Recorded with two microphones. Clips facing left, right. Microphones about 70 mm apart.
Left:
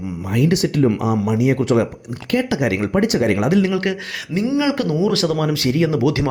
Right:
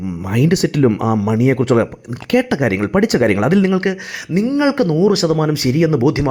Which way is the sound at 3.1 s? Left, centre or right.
Right.